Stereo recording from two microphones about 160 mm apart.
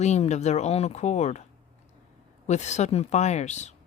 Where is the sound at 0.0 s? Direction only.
45° left (ahead or behind).